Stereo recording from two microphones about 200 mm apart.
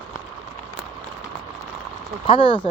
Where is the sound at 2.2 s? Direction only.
25° left (ahead or behind).